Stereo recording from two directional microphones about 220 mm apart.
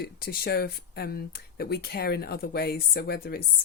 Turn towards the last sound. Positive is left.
turn(degrees=45)  # may be behind; listen again after turning